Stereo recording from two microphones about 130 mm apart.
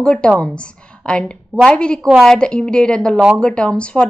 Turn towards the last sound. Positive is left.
turn(degrees=10)  # may be behind; listen again after turning